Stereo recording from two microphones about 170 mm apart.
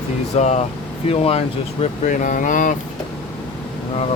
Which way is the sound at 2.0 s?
50° left (ahead or behind).